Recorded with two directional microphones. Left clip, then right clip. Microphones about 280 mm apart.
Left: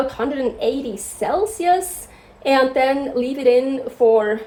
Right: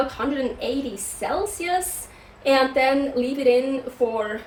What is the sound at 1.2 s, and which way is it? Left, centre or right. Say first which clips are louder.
Speech: left 5 dB; left.